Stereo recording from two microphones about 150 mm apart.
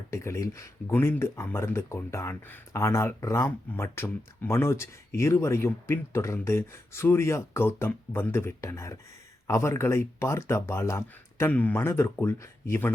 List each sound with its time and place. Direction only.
0.1 s speech: 20° left (ahead or behind)